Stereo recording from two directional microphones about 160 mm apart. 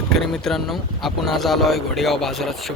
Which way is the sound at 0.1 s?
Centre (ahead or behind).